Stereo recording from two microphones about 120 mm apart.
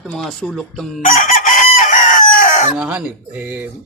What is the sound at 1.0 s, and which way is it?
Chicken, 90° left.